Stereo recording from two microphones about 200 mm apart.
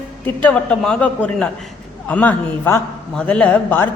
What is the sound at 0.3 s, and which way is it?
A man's voice, 10° left (ahead or behind).